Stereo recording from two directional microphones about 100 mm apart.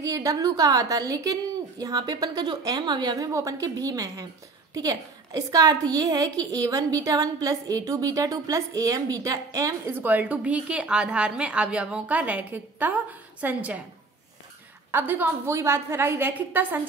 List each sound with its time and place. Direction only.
0.0 s a woman's voice: 35° right (ahead or behind)
3.3 s a woman's voice: 35° right (ahead or behind)
9.8 s a woman's voice: 20° right (ahead or behind)
14.9 s a woman's voice: 20° right (ahead or behind)